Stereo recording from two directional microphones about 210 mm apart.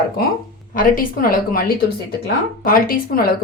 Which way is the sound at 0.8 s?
40° left (ahead or behind).